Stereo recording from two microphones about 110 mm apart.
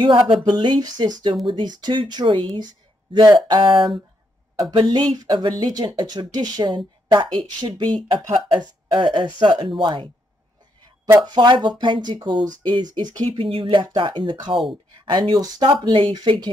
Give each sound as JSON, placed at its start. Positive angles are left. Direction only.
{"t": 0.0, "sound": "speech", "side_deg": -50}
{"t": 11.1, "sound": "speech", "side_deg": -40}